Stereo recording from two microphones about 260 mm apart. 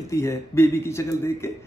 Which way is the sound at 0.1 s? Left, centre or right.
Centre.